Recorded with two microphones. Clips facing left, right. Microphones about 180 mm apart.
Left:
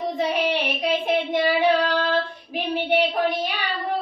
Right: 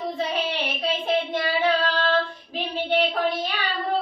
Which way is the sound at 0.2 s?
10° left (ahead or behind).